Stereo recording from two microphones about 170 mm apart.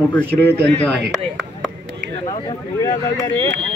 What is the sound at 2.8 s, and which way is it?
Speech, 20° left (ahead or behind).